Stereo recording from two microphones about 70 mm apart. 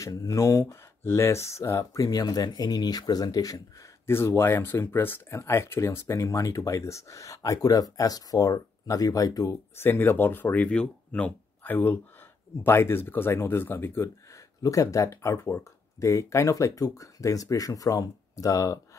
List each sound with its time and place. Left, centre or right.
0.1 s speech: left
1.0 s speech: left
4.0 s speech: left
9.8 s speech: left
14.0 s speech: left